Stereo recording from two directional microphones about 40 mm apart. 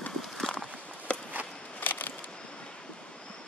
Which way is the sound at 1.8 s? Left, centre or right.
Left.